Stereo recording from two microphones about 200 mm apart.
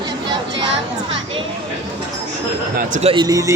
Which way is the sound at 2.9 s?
25° right (ahead or behind).